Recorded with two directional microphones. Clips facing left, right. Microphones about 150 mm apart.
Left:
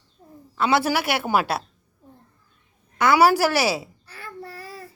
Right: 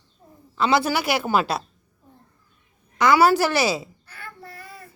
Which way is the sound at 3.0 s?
10° left (ahead or behind).